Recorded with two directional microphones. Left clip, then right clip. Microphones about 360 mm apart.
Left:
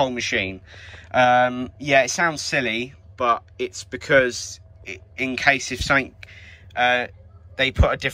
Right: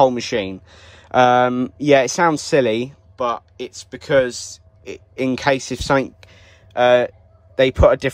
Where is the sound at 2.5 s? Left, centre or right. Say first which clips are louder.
Right 6 dB; centre.